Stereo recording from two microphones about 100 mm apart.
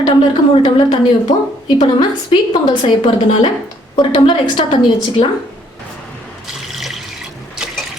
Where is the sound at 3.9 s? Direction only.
55° left (ahead or behind).